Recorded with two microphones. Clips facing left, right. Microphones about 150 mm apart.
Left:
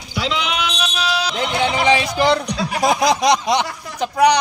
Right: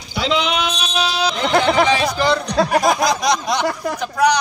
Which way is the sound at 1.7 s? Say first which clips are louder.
Right 2 dB; 50° right (ahead or behind).